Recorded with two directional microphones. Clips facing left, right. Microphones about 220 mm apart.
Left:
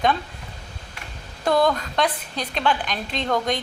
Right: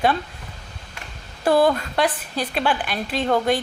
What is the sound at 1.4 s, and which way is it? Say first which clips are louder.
A woman's voice: right 3 dB; 5° right (ahead or behind).